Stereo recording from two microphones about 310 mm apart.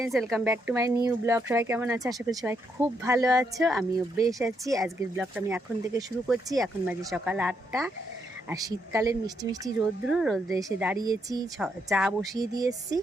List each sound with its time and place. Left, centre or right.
0.0 s speech: centre
3.6 s speech: centre
4.4 s speech: centre
10.1 s speech: centre
10.5 s speech: centre